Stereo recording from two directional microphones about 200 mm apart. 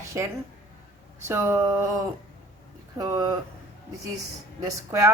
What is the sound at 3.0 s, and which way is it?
Speech, 20° right (ahead or behind).